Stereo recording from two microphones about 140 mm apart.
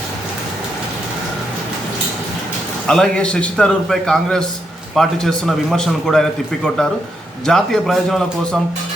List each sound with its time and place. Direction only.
2.8 s a man's voice: 5° left (ahead or behind)